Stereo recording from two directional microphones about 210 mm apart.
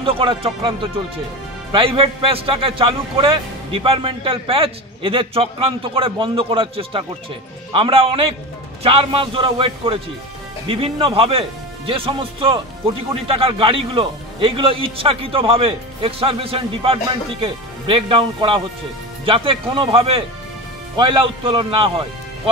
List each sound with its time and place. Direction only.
0.0 s speech: 25° right (ahead or behind)